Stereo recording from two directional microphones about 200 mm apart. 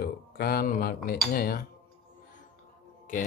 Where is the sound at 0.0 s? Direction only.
50° left (ahead or behind).